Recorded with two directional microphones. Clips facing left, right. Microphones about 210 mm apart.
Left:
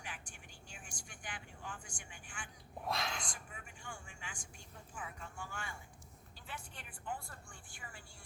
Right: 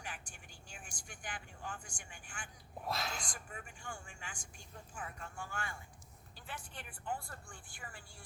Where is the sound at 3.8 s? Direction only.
40° right (ahead or behind).